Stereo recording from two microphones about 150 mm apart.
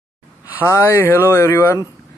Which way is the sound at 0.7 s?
20° left (ahead or behind).